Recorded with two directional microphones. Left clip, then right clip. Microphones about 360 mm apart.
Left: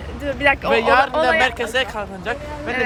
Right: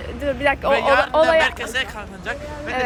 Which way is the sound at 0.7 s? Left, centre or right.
Centre.